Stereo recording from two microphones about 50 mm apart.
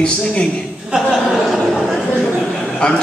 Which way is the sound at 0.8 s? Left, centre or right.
Centre.